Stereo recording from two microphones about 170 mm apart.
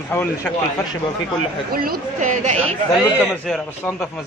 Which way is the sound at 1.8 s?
50° right (ahead or behind).